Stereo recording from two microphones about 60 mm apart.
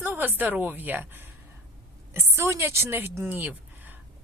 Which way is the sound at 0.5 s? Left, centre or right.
Right.